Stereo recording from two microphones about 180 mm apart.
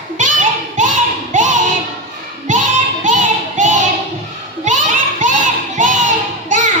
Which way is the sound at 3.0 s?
45° right (ahead or behind).